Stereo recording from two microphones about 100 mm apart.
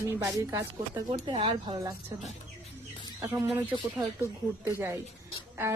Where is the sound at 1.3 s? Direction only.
65° right (ahead or behind).